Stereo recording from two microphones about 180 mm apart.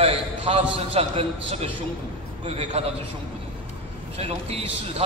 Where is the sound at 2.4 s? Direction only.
35° right (ahead or behind).